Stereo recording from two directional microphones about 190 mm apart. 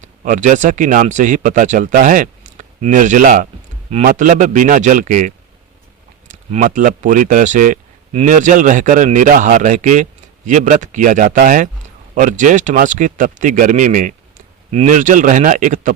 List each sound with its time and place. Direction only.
0.0 s speech: 40° right (ahead or behind)